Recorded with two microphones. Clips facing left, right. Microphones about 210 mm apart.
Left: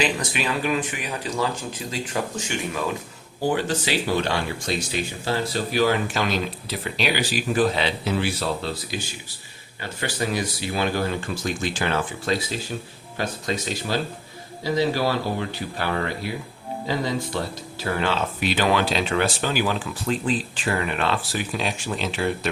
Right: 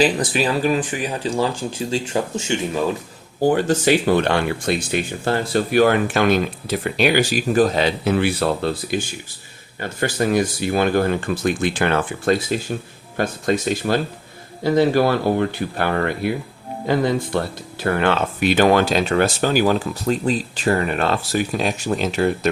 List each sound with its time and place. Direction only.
0.0 s speech: 35° right (ahead or behind)
3.4 s speech: 45° right (ahead or behind)